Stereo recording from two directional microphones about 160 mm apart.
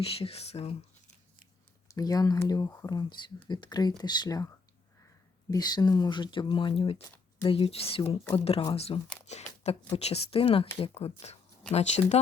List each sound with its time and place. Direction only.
0.0 s speech: 40° left (ahead or behind)
1.9 s speech: 20° left (ahead or behind); by 12.2 s 45° left (ahead or behind)